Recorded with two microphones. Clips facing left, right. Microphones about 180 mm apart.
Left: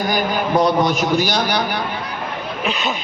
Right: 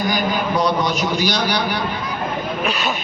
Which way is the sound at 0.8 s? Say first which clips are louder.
Left 3 dB; 50° left (ahead or behind).